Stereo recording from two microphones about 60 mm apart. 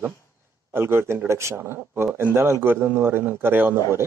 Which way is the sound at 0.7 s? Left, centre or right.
Right.